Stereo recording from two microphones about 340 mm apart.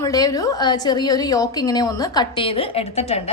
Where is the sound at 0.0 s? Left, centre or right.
Centre.